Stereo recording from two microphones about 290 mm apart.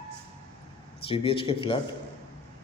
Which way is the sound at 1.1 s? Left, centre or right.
Centre.